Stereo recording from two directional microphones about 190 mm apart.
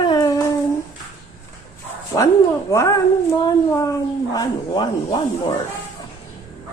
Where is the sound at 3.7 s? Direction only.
15° left (ahead or behind).